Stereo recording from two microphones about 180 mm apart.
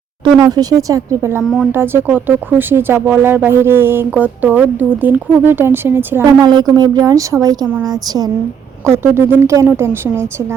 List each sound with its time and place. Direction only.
0.3 s speech: 20° right (ahead or behind)
6.2 s speech: 20° right (ahead or behind)
8.9 s speech: 15° right (ahead or behind)